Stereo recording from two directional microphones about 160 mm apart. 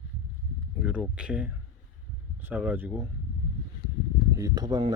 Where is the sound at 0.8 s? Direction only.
5° right (ahead or behind).